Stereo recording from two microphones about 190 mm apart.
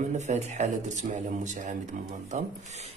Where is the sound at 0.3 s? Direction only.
35° right (ahead or behind).